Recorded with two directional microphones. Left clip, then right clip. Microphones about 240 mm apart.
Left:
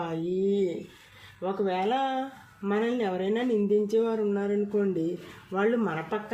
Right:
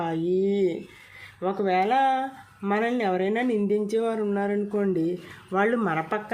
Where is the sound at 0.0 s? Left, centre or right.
Right.